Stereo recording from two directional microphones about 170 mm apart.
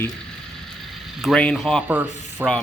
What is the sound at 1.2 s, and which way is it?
Speech, 5° left (ahead or behind).